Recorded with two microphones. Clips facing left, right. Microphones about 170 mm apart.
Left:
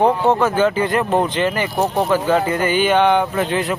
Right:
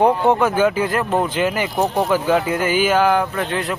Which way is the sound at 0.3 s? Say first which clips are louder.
Even; 10° right (ahead or behind).